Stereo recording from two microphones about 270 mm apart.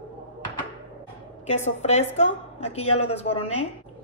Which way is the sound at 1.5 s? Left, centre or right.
Left.